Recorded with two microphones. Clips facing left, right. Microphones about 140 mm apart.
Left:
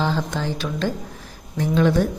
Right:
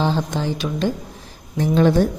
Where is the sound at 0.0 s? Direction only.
20° right (ahead or behind).